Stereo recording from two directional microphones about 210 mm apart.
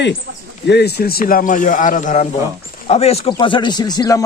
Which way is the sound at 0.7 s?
50° left (ahead or behind).